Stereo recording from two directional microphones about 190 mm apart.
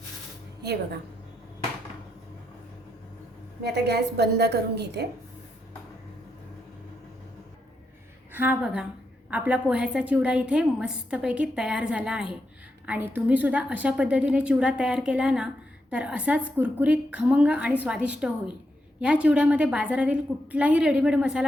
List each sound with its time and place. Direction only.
3.6 s a woman's voice: 60° right (ahead or behind)
8.3 s a woman's voice: 10° right (ahead or behind)